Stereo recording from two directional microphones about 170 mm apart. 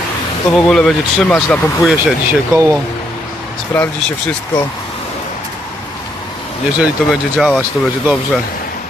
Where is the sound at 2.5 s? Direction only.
15° right (ahead or behind).